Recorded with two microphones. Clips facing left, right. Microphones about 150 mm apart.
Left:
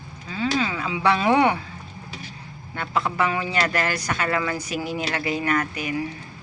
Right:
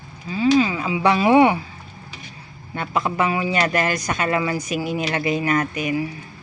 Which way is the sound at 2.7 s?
20° right (ahead or behind).